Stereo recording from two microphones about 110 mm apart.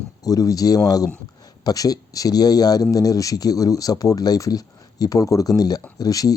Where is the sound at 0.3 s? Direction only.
30° left (ahead or behind).